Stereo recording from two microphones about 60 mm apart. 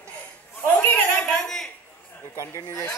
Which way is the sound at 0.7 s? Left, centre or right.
Left.